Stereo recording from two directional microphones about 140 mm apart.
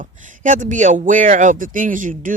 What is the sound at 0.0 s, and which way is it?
Speech, 65° right (ahead or behind).